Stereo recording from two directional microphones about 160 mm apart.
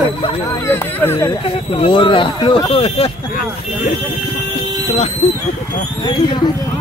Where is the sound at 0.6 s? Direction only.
15° left (ahead or behind).